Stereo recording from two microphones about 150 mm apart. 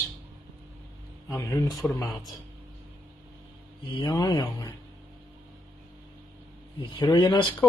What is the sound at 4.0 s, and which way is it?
Speech, 30° left (ahead or behind).